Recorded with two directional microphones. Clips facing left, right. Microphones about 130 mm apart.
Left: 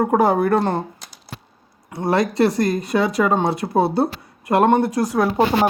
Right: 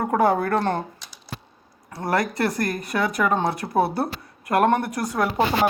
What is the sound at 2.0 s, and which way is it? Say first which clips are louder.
Speech: left 5 dB; 25° left (ahead or behind).